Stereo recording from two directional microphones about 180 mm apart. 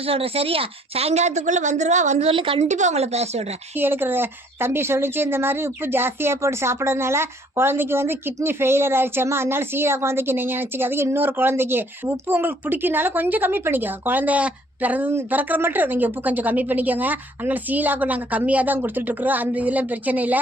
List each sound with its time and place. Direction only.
0.0 s a woman's voice: 30° right (ahead or behind)
3.8 s speech: 10° right (ahead or behind)